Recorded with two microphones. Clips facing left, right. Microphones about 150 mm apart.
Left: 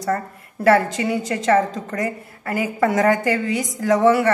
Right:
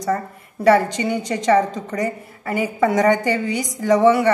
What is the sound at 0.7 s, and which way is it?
A woman's voice, centre (ahead or behind).